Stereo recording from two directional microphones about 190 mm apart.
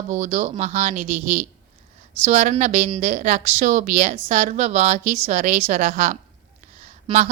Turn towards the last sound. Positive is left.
turn(degrees=-40)  # may be behind; listen again after turning